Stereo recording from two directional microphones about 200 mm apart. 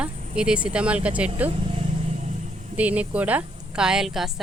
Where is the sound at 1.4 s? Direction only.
30° right (ahead or behind).